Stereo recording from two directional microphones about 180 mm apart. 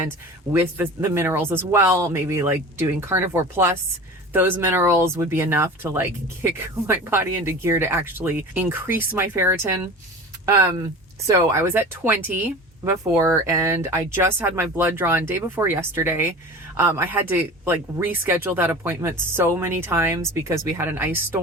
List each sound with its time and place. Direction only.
0.5 s speech: 10° right (ahead or behind)